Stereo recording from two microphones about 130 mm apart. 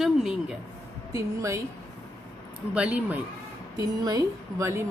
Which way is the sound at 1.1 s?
25° right (ahead or behind).